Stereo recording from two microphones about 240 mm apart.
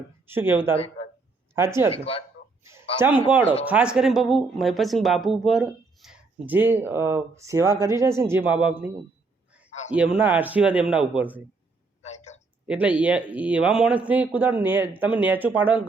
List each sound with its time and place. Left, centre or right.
0.3 s a man's voice: centre
1.9 s speech: left
3.7 s speech: centre
9.9 s speech: centre
12.0 s a sound: left
12.6 s a man's voice: centre